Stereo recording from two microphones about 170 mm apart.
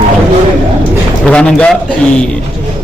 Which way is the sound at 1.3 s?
5° left (ahead or behind).